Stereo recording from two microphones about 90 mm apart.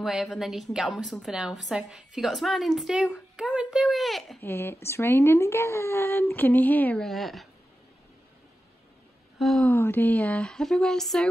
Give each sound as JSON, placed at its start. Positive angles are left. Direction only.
{"t": 0.0, "sound": "a woman's voice", "side_deg": -5}
{"t": 4.4, "sound": "speech", "side_deg": 25}
{"t": 7.0, "sound": "a woman's voice", "side_deg": 0}
{"t": 9.6, "sound": "speech", "side_deg": 20}